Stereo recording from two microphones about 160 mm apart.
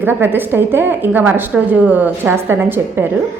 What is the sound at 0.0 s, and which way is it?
A woman's voice, 15° right (ahead or behind).